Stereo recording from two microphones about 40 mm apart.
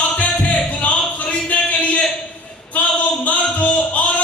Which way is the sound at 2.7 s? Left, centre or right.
Left.